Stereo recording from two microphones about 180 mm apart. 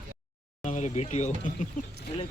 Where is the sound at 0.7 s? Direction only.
40° left (ahead or behind).